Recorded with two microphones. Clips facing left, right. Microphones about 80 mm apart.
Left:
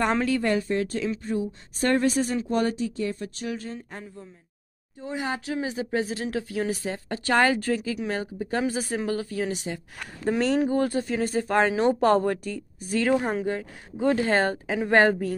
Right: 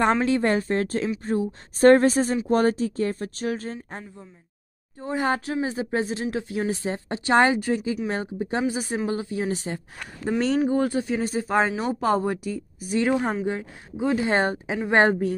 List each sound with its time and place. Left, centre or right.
0.2 s speech: right
5.0 s speech: right
9.5 s speech: right
10.9 s speech: centre
13.1 s speech: centre
13.5 s speech: centre
14.0 s speech: centre
14.3 s speech: right